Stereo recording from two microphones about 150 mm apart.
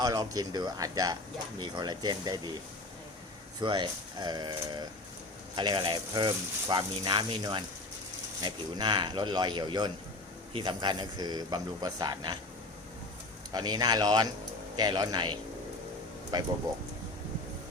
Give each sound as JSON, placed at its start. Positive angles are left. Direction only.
{"t": 0.0, "sound": "speech", "side_deg": -25}
{"t": 3.6, "sound": "speech", "side_deg": -30}
{"t": 13.5, "sound": "speech", "side_deg": -25}